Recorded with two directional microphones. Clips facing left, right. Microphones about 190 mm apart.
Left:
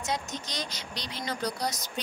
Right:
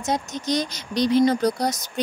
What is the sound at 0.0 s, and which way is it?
A woman's voice, 45° right (ahead or behind).